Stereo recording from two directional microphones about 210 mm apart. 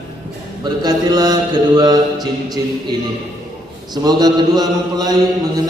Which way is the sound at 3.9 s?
20° right (ahead or behind).